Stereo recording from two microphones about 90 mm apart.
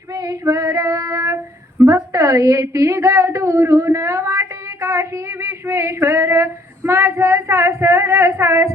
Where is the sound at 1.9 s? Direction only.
35° right (ahead or behind).